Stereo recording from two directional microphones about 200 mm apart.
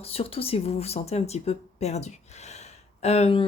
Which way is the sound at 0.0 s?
30° left (ahead or behind).